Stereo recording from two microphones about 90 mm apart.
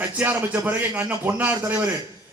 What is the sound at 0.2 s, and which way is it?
A man's voice, 20° right (ahead or behind).